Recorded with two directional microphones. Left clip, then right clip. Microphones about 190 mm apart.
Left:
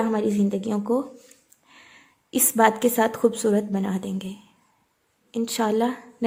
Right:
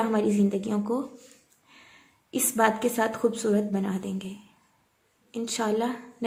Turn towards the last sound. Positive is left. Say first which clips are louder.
# left 4 dB
turn(degrees=30)  # may be behind; listen again after turning